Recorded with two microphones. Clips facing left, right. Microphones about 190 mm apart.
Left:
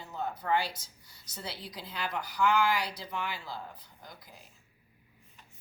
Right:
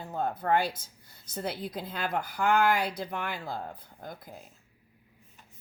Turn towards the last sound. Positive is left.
turn(degrees=-55)  # may be behind; listen again after turning